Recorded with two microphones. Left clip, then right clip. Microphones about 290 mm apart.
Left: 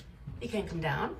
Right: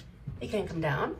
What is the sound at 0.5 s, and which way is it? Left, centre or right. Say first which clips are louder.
Speech: right 3 dB; centre.